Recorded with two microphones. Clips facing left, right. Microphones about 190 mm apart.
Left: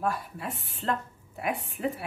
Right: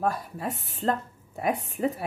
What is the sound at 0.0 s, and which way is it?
A woman's voice, 40° right (ahead or behind).